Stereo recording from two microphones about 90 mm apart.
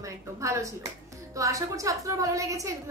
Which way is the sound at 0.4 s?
35° right (ahead or behind).